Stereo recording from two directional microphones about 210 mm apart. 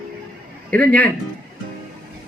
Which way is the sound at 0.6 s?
5° left (ahead or behind).